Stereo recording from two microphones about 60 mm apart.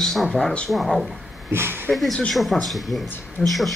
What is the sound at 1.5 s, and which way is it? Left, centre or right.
Speech, right.